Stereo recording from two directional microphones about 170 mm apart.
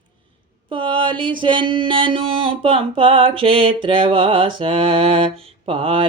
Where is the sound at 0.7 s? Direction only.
30° right (ahead or behind).